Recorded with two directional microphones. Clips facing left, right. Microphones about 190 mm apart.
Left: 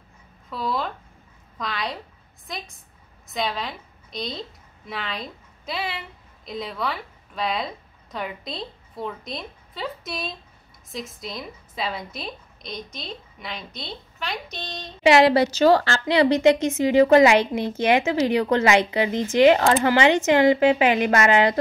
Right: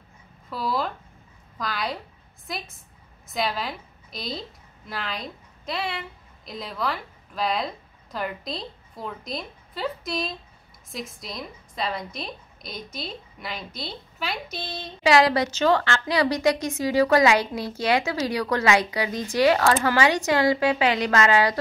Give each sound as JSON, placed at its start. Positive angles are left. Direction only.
{"t": 0.5, "sound": "a woman's voice", "side_deg": 0}
{"t": 15.0, "sound": "a woman's voice", "side_deg": 25}